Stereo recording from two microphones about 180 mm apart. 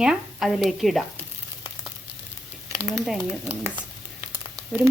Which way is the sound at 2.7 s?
Centre (ahead or behind).